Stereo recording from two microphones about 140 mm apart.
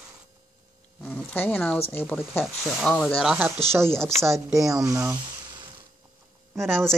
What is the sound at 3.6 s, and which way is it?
Speech, 20° right (ahead or behind).